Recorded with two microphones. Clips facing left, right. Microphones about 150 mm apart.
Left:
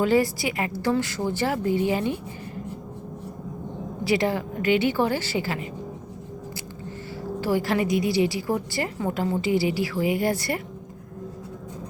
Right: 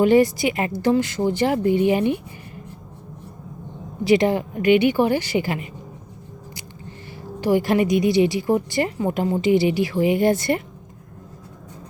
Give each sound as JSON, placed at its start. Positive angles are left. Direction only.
{"t": 0.0, "sound": "a woman's voice", "side_deg": -20}
{"t": 4.0, "sound": "a woman's voice", "side_deg": -20}
{"t": 7.4, "sound": "a woman's voice", "side_deg": -20}